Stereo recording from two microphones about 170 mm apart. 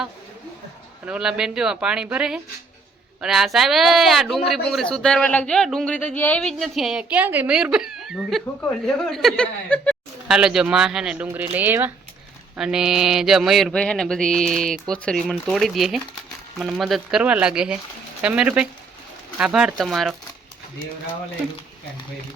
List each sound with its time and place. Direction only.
1.0 s speech: 5° right (ahead or behind)
10.3 s speech: 5° right (ahead or behind)